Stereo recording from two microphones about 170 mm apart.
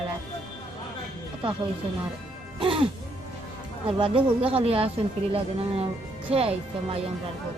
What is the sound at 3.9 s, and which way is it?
Speech, 30° right (ahead or behind).